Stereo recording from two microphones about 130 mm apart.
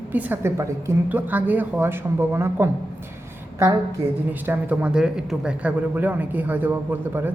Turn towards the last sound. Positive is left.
turn(degrees=-15)  # may be behind; listen again after turning